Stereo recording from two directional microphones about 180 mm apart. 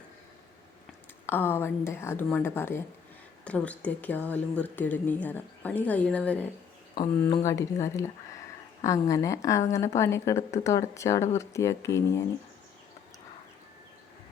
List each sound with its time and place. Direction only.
1.3 s a woman's voice: 10° left (ahead or behind)
7.3 s a woman's voice: 20° left (ahead or behind)